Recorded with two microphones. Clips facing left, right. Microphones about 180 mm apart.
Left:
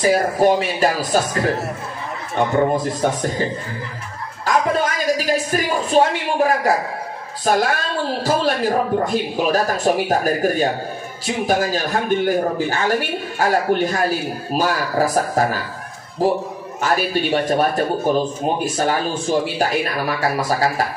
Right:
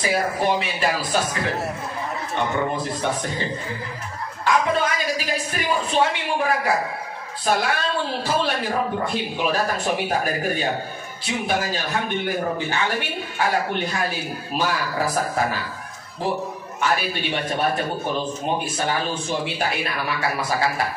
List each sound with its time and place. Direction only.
0.0 s speech: 45° left (ahead or behind)
4.5 s speech: 40° left (ahead or behind)
16.8 s speech: 40° left (ahead or behind)